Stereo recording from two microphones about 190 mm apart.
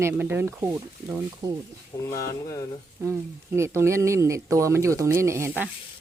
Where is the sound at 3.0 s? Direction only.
15° right (ahead or behind).